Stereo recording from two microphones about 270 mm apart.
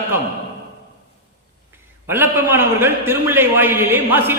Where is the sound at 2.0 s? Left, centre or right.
Centre.